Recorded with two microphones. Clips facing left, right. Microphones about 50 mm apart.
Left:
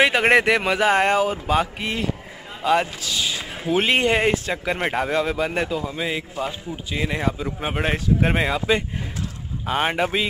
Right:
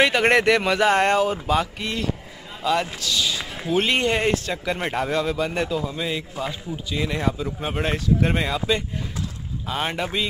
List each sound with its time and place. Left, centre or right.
0.0 s a man's voice: centre